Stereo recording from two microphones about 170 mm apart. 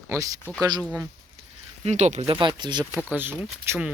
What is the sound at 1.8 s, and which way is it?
Speech, 45° right (ahead or behind).